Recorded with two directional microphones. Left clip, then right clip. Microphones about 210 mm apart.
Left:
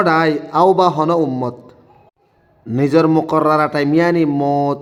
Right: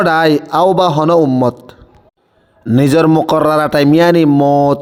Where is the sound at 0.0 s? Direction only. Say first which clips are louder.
Right 4 dB; 40° right (ahead or behind).